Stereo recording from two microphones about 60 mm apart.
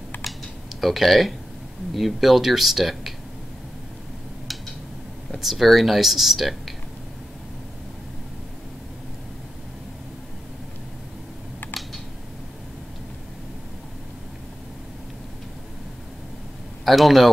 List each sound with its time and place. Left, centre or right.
0.1 s typing: left
0.7 s speech: centre
5.3 s speech: centre
16.8 s a man's voice: centre